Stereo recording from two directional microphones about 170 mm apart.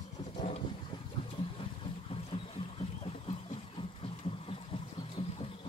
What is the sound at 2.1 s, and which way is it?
Boat, 35° left (ahead or behind).